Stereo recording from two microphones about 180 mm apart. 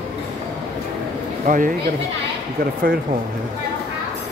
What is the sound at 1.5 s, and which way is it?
Speech, 50° right (ahead or behind).